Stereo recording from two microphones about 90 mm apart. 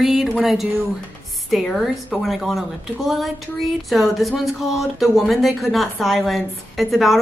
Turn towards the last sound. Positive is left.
turn(degrees=0)  # may be behind; listen again after turning